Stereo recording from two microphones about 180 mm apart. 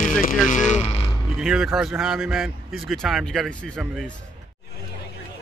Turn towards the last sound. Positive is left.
turn(degrees=5)  # may be behind; listen again after turning